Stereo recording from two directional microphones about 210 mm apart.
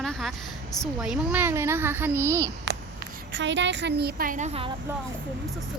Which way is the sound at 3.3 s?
60° right (ahead or behind).